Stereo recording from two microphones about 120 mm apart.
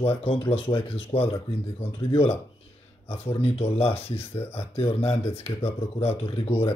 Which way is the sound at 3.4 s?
55° left (ahead or behind).